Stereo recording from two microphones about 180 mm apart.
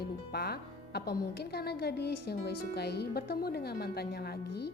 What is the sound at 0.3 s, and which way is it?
Speech, 60° left (ahead or behind).